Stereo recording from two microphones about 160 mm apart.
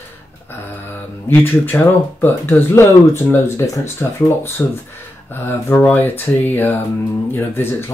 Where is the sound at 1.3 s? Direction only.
10° left (ahead or behind).